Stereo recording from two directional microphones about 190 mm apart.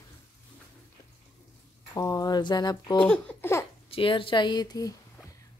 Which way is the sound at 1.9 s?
20° left (ahead or behind).